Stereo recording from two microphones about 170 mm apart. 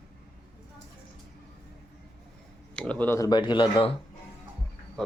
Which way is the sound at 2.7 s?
5° left (ahead or behind).